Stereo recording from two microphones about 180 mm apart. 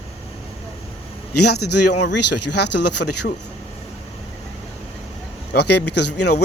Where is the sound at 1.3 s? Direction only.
65° left (ahead or behind).